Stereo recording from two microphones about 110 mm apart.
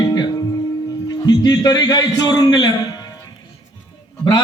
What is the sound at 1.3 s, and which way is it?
A man's voice, 35° left (ahead or behind).